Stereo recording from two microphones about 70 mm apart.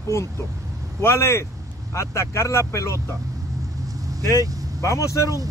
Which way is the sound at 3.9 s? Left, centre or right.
Right.